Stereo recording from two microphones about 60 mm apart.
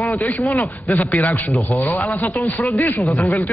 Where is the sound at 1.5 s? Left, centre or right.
Left.